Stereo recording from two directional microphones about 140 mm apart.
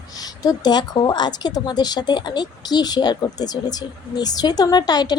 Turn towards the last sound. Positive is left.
turn(degrees=30)  # may be behind; listen again after turning